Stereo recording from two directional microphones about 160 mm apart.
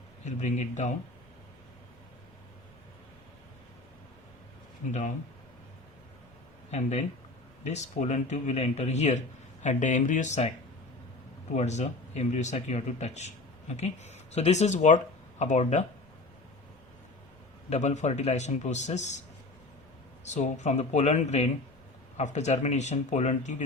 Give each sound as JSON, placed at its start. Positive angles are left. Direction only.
{"t": 0.3, "sound": "speech", "side_deg": 50}
{"t": 4.9, "sound": "speech", "side_deg": 50}
{"t": 6.7, "sound": "speech", "side_deg": 45}
{"t": 11.5, "sound": "speech", "side_deg": 45}
{"t": 17.7, "sound": "speech", "side_deg": 45}
{"t": 20.3, "sound": "speech", "side_deg": 45}